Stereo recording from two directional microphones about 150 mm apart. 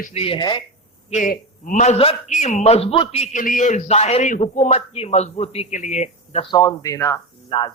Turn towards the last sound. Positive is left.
turn(degrees=35)  # may be behind; listen again after turning